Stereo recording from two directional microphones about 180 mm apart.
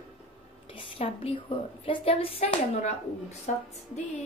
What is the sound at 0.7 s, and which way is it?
A woman's voice, 30° left (ahead or behind).